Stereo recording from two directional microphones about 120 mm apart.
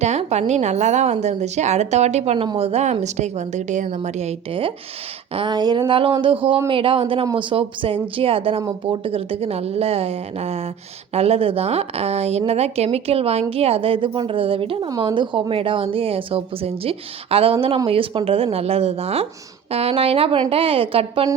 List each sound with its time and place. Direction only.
0.0 s a woman's voice: 65° right (ahead or behind); by 3.8 s 80° right
3.9 s a woman's voice: 70° right (ahead or behind)
5.3 s a sound: 40° right (ahead or behind)
5.9 s a woman's voice: 45° right (ahead or behind)
14.8 s a woman's voice: 40° right (ahead or behind)